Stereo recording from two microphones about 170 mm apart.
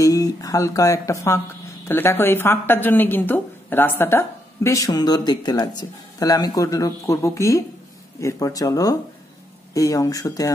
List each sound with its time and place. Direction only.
0.0 s a woman's voice: 20° left (ahead or behind)